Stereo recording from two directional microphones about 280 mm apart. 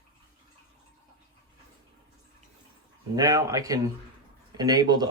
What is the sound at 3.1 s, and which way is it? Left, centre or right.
Speech, centre.